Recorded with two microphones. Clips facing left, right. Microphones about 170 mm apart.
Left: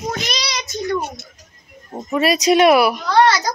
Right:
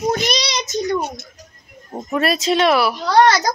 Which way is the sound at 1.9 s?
5° left (ahead or behind).